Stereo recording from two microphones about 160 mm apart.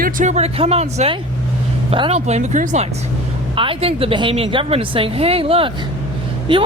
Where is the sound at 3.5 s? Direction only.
35° right (ahead or behind).